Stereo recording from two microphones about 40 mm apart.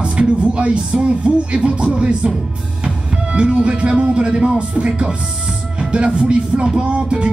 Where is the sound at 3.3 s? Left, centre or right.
Right.